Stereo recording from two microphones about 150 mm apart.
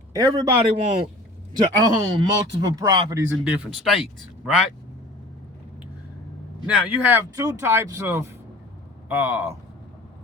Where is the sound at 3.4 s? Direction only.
5° right (ahead or behind).